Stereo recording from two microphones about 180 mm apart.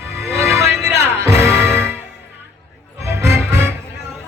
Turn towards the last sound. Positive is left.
turn(degrees=-15)  # may be behind; listen again after turning